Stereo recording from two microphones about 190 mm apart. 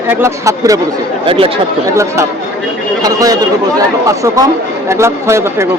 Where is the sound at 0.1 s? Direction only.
15° right (ahead or behind).